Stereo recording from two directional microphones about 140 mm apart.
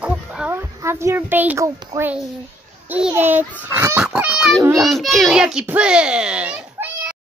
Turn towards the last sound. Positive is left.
turn(degrees=-10)  # may be behind; listen again after turning